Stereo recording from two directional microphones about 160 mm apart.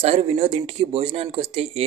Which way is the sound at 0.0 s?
40° right (ahead or behind).